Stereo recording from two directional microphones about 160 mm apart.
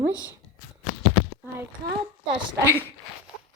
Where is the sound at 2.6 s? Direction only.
15° right (ahead or behind).